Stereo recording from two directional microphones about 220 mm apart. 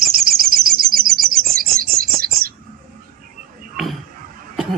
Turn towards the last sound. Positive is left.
turn(degrees=-35)  # may be behind; listen again after turning